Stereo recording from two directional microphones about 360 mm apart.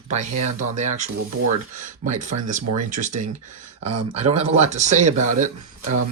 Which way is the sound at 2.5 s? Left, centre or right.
Right.